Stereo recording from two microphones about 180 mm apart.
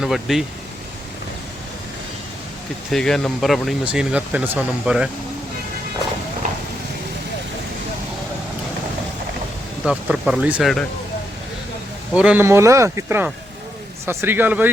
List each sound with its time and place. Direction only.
0.0 s speech: centre (ahead or behind)
2.9 s speech: 5° left (ahead or behind)
6.4 s a sound: 45° right (ahead or behind)
9.8 s speech: 5° right (ahead or behind)
12.1 s speech: 5° right (ahead or behind)